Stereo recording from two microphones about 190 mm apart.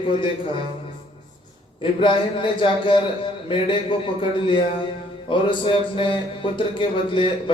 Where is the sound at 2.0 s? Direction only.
25° left (ahead or behind).